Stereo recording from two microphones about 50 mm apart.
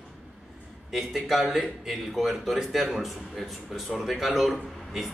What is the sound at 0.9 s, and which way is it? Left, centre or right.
A man's voice, centre.